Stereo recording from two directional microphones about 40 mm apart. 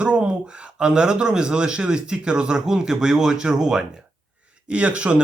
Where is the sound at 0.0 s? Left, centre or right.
Right.